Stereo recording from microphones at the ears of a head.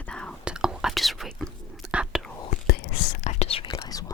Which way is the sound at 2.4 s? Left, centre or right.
Left.